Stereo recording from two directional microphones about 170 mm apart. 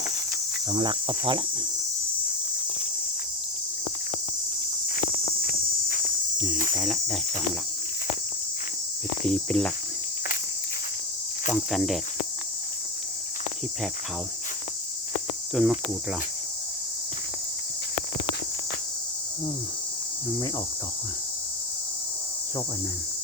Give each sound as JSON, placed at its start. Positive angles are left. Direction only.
{"t": 0.7, "sound": "insect", "side_deg": -25}
{"t": 6.3, "sound": "cricket", "side_deg": 0}
{"t": 9.2, "sound": "cricket", "side_deg": 5}
{"t": 11.4, "sound": "cricket", "side_deg": 0}
{"t": 15.5, "sound": "cricket", "side_deg": 0}